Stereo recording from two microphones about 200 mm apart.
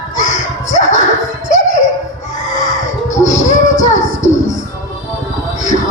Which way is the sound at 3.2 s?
35° left (ahead or behind).